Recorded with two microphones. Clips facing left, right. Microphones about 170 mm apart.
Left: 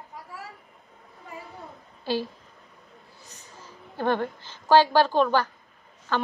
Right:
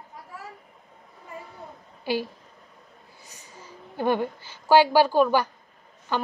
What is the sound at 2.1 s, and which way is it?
Speech, 15° right (ahead or behind).